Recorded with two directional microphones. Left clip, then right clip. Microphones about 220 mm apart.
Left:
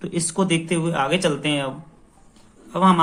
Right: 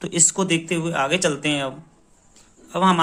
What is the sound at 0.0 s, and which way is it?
Speech, 35° right (ahead or behind).